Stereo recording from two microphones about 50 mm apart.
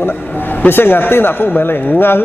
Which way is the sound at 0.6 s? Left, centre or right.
Left.